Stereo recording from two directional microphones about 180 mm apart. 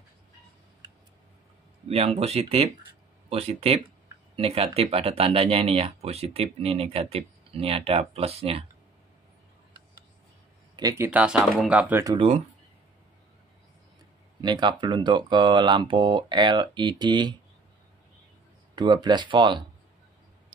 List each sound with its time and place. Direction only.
1.9 s speech: 35° right (ahead or behind)
10.8 s speech: 20° right (ahead or behind)
11.1 s speech: 5° right (ahead or behind)
12.0 s speech: 20° right (ahead or behind)
14.4 s speech: 25° right (ahead or behind)
18.8 s speech: 25° right (ahead or behind)